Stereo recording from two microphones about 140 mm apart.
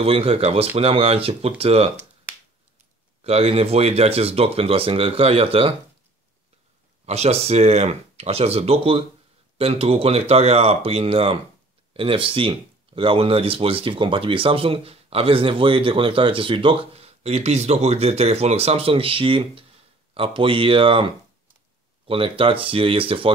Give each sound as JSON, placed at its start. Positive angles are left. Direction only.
{"t": 0.0, "sound": "speech", "side_deg": -45}
{"t": 3.3, "sound": "speech", "side_deg": -45}
{"t": 7.1, "sound": "speech", "side_deg": -50}